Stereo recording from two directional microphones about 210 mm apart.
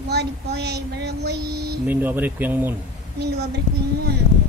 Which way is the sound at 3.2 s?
50° right (ahead or behind).